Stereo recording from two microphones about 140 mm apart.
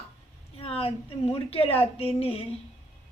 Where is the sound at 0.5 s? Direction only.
45° left (ahead or behind).